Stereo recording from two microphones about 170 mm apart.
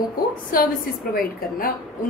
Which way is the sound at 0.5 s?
60° left (ahead or behind).